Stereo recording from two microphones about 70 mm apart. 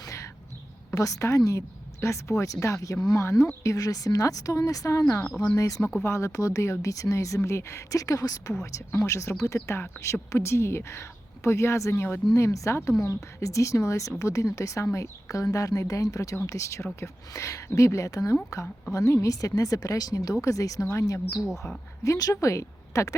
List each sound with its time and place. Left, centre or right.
0.9 s a woman's voice: left
6.0 s a woman's voice: left
9.0 s a woman's voice: left
12.3 s a woman's voice: left